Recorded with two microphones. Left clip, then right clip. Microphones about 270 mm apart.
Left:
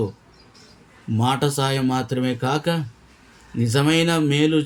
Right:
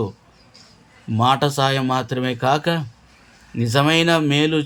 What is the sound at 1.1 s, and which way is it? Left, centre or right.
Speech, centre.